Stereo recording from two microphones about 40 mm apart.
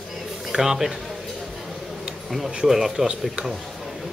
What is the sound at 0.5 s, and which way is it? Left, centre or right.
Speech, centre.